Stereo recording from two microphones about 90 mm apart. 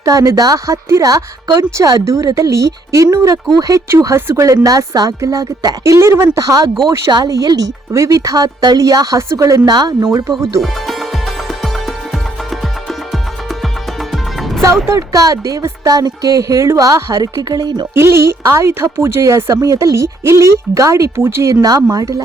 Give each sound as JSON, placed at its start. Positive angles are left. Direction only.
{"t": 0.0, "sound": "a woman's voice", "side_deg": -40}
{"t": 2.0, "sound": "a woman's voice", "side_deg": -35}
{"t": 9.6, "sound": "speech", "side_deg": -50}
{"t": 10.6, "sound": "music", "side_deg": 0}
{"t": 14.1, "sound": "music", "side_deg": 0}
{"t": 14.8, "sound": "a woman's voice", "side_deg": -35}
{"t": 17.9, "sound": "a woman's voice", "side_deg": -30}
{"t": 21.5, "sound": "a woman's voice", "side_deg": -40}